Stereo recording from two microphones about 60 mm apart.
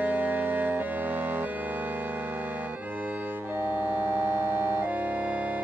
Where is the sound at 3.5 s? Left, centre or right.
Right.